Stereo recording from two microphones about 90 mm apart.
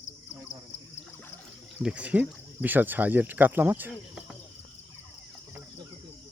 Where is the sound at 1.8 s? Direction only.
15° right (ahead or behind).